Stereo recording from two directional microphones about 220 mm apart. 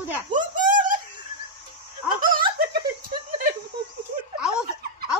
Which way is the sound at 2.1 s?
40° right (ahead or behind).